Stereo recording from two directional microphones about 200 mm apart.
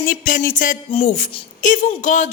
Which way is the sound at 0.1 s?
40° left (ahead or behind).